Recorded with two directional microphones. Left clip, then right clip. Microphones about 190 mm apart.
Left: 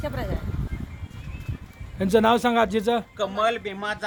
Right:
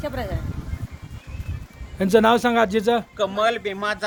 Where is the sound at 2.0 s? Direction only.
Centre (ahead or behind).